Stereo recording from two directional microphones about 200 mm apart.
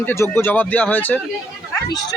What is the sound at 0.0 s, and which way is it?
Speech, 10° left (ahead or behind).